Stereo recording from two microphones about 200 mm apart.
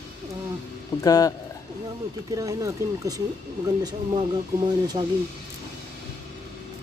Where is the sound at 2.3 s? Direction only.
15° right (ahead or behind).